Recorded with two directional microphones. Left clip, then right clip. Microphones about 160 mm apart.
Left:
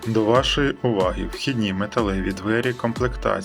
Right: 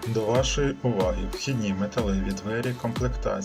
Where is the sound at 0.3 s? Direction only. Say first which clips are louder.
Left 5 dB; 70° left (ahead or behind).